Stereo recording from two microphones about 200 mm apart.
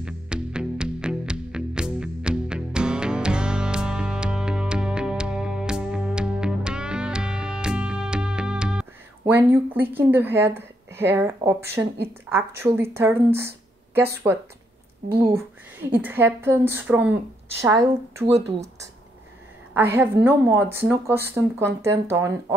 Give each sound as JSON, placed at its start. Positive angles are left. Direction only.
{"t": 0.0, "sound": "music", "side_deg": -5}
{"t": 9.3, "sound": "speech", "side_deg": -10}
{"t": 15.2, "sound": "speech", "side_deg": -15}
{"t": 18.2, "sound": "speech", "side_deg": -35}
{"t": 19.7, "sound": "a woman's voice", "side_deg": -10}